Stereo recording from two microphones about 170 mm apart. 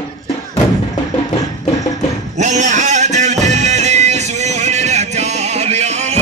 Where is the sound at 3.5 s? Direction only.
40° right (ahead or behind).